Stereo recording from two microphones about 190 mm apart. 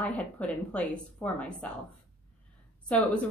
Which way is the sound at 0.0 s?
5° left (ahead or behind).